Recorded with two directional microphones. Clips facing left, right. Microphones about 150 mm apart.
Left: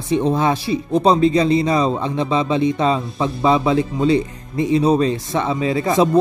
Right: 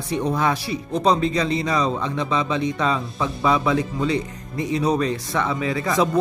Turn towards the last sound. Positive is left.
turn(degrees=25)  # may be behind; listen again after turning